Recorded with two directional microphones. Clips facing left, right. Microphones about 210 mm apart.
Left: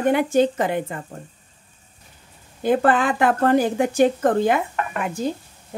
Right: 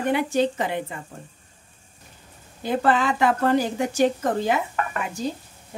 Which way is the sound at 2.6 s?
50° left (ahead or behind).